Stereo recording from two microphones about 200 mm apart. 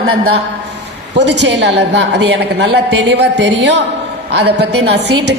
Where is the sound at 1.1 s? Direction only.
60° right (ahead or behind).